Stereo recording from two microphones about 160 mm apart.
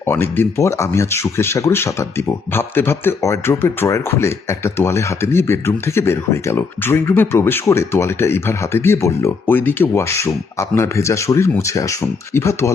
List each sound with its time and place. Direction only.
0.1 s speech: 15° left (ahead or behind)